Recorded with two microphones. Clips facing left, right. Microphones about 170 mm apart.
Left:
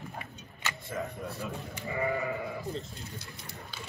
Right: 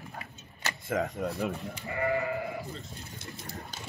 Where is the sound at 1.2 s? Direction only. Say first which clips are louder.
Right 6 dB; 65° right (ahead or behind).